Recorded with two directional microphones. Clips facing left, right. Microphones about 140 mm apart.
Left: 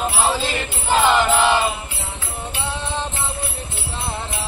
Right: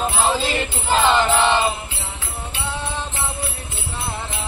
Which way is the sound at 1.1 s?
5° left (ahead or behind).